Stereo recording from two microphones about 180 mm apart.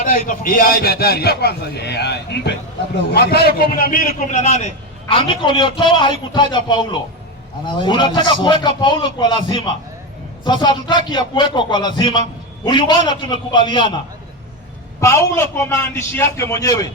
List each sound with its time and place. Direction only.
0.0 s a man's voice: 50° left (ahead or behind)
4.3 s a man's voice: 40° left (ahead or behind)
15.0 s a man's voice: 15° left (ahead or behind)